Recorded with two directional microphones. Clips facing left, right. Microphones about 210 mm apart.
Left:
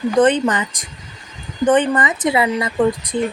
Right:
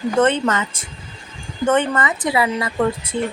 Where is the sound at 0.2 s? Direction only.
15° left (ahead or behind).